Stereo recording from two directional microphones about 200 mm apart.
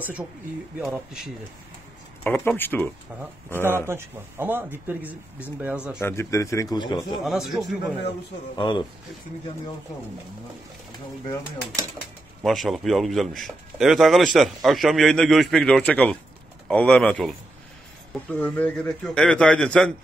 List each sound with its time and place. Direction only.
0.7 s a man's voice: 5° right (ahead or behind)
2.2 s speech: 10° left (ahead or behind)
3.6 s speech: 10° right (ahead or behind)
5.9 s speech: 15° left (ahead or behind)
7.1 s a man's voice: centre (ahead or behind)
8.5 s a man's voice: 25° left (ahead or behind)
12.4 s a man's voice: centre (ahead or behind)
18.3 s a man's voice: 5° left (ahead or behind)